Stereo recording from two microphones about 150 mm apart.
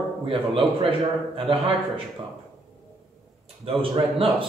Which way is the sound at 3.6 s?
40° right (ahead or behind).